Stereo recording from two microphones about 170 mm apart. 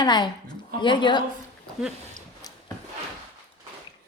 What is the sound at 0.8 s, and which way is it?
Speech, 25° left (ahead or behind).